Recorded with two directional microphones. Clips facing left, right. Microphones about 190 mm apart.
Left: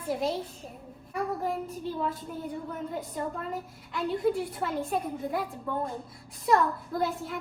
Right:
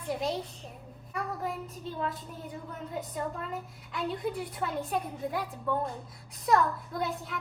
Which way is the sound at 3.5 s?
Centre (ahead or behind).